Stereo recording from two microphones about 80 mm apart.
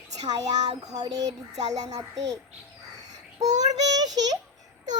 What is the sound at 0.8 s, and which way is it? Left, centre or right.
Speech, right.